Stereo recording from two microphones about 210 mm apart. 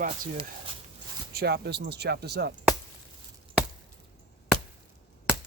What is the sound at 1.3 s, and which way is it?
Speech, 50° right (ahead or behind).